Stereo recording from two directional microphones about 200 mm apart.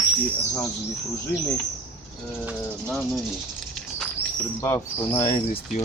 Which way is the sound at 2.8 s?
5° left (ahead or behind).